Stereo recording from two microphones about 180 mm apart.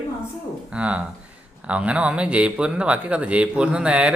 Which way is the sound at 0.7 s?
5° right (ahead or behind).